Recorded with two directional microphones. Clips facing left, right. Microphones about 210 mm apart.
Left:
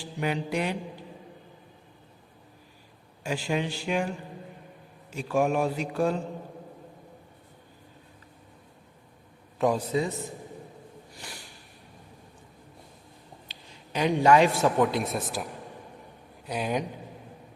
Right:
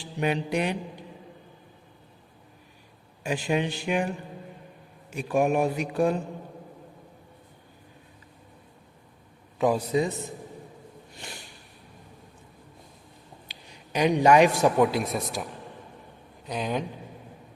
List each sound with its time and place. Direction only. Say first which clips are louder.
0.2 s mantra: right 2 dB; 20° right (ahead or behind)
3.2 s speech: right 2 dB; 20° right (ahead or behind)
5.1 s speech: right 2 dB; 15° right (ahead or behind)
9.6 s a man's voice: right 1 dB; centre (ahead or behind)
13.5 s a man's voice: right 3 dB; 15° right (ahead or behind)
14.9 s a man's voice: right 1 dB; centre (ahead or behind)